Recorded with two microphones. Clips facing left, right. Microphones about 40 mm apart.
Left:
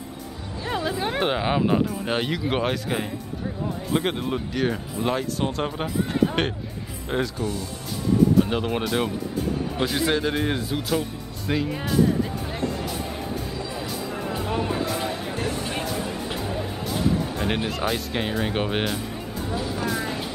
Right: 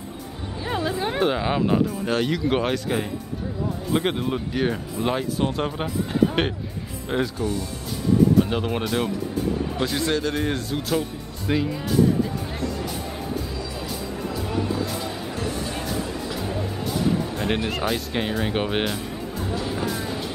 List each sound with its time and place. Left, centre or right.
0.7 s chatter: centre
1.2 s speech: centre
2.0 s speech: centre
8.4 s speech: centre
12.5 s music: left
12.8 s music: centre
14.1 s music: left
16.0 s a sound: centre
16.3 s music: centre
17.6 s speech: centre
19.6 s music: centre